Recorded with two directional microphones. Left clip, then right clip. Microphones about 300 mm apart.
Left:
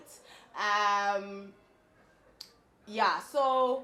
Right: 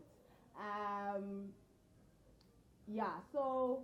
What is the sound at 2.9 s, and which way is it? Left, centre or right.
Speech, centre.